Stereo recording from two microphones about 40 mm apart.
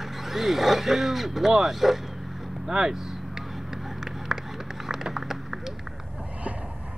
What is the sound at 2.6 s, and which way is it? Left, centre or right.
Vehicle, centre.